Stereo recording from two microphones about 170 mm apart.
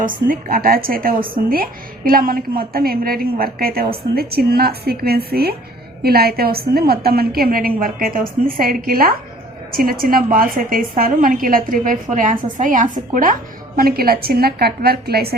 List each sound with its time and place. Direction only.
0.0 s a woman's voice: 55° right (ahead or behind)
13.7 s a woman's voice: 60° right (ahead or behind)